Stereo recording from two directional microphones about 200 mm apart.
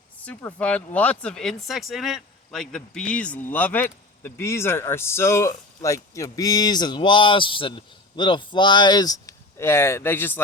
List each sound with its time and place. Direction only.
0.3 s speech: 5° left (ahead or behind)